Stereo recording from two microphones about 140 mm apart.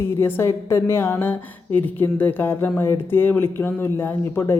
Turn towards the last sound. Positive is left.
turn(degrees=15)  # may be behind; listen again after turning